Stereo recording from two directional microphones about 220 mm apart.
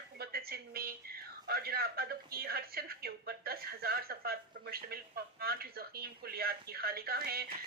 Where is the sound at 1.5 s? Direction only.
45° right (ahead or behind).